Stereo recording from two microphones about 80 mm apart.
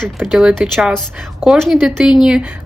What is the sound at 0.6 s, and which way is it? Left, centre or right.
Speech, centre.